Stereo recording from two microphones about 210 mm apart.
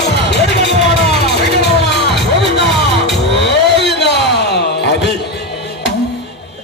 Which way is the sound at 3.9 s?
55° left (ahead or behind).